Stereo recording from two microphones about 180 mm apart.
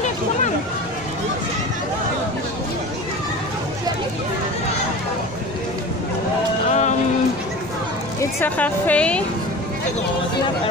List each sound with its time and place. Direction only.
6.7 s music: 40° left (ahead or behind)
8.2 s a woman's voice: 10° left (ahead or behind)